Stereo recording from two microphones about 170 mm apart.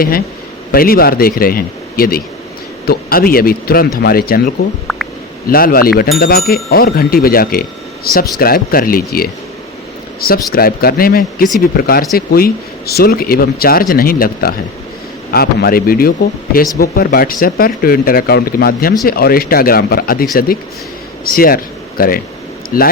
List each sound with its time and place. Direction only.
0.7 s speech: 60° left (ahead or behind)
21.2 s speech: 60° left (ahead or behind)